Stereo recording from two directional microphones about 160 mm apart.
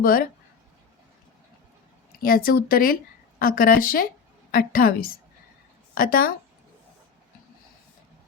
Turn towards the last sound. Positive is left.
turn(degrees=65)  # may be behind; listen again after turning